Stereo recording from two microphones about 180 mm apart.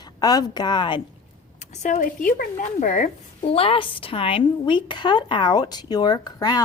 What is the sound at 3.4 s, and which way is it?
Speech, 30° left (ahead or behind).